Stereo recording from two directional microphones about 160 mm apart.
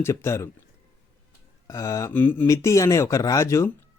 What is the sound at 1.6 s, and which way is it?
Speech, 20° left (ahead or behind).